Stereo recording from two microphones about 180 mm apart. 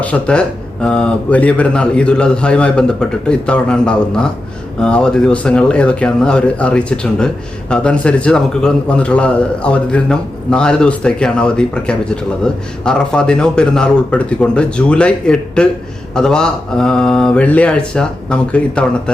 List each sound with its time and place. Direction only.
0.0 s a man's voice: 5° left (ahead or behind)